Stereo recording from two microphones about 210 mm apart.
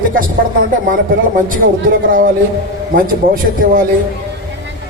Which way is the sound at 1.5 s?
40° right (ahead or behind).